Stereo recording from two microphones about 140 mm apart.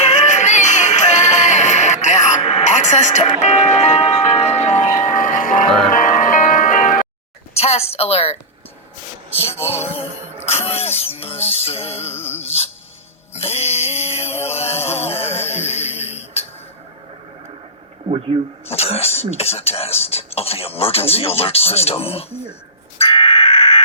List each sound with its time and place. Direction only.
0.1 s music: 55° left (ahead or behind)
4.7 s music: 70° left (ahead or behind)
7.5 s speech: 50° left (ahead or behind)
9.6 s music: 15° left (ahead or behind)
10.4 s speech: 45° left (ahead or behind)
12.1 s music: 15° left (ahead or behind)
12.4 s speech: 45° left (ahead or behind)
13.3 s music: 45° left (ahead or behind)
18.6 s speech: 45° left (ahead or behind)
23.0 s caw: 40° left (ahead or behind)